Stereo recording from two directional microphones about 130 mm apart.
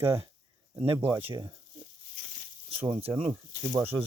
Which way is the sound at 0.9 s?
20° right (ahead or behind).